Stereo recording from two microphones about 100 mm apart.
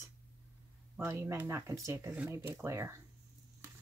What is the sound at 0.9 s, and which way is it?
Speech, 25° right (ahead or behind).